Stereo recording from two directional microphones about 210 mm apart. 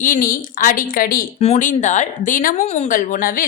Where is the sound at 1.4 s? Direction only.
35° left (ahead or behind).